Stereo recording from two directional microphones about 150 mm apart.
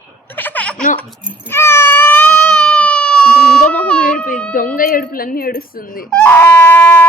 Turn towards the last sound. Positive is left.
turn(degrees=10)  # may be behind; listen again after turning